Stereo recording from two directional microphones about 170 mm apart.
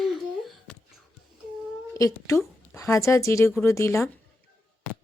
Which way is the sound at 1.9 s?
20° left (ahead or behind).